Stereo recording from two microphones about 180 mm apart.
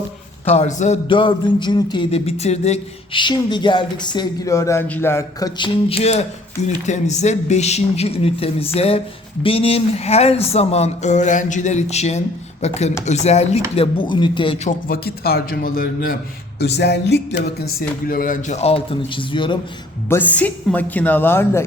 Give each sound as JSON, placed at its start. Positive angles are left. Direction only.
{"t": 0.4, "sound": "speech", "side_deg": 35}
{"t": 1.0, "sound": "a sound", "side_deg": 25}
{"t": 6.8, "sound": "speech", "side_deg": 40}
{"t": 14.8, "sound": "a man's voice", "side_deg": 60}
{"t": 16.6, "sound": "a man's voice", "side_deg": 65}
{"t": 20.1, "sound": "a woman's voice", "side_deg": 10}